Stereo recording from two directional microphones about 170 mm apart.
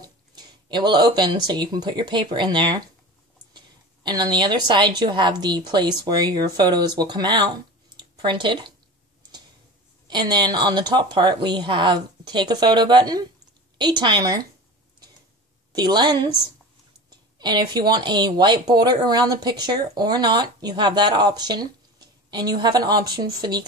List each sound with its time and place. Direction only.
0.0 s a woman's voice: 25° right (ahead or behind)
10.0 s speech: 25° right (ahead or behind)
15.7 s speech: 25° right (ahead or behind)
17.4 s speech: 25° right (ahead or behind)